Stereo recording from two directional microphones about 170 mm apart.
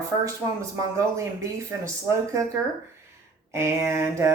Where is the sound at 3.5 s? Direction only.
15° right (ahead or behind).